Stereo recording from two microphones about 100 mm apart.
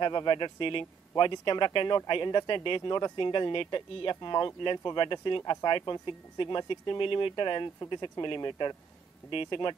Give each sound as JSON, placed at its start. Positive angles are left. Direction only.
{"t": 0.0, "sound": "speech", "side_deg": 50}